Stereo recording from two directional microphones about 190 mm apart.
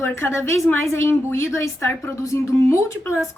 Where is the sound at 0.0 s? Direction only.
15° left (ahead or behind).